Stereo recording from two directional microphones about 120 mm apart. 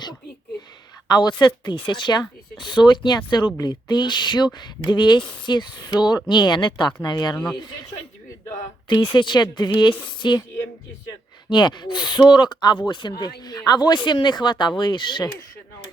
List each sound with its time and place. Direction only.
1.0 s speech: 35° left (ahead or behind)
8.4 s speech: 40° left (ahead or behind)
11.4 s speech: 40° left (ahead or behind)